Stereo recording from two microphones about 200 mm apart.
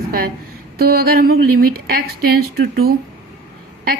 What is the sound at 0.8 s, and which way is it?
A woman's voice, 50° right (ahead or behind).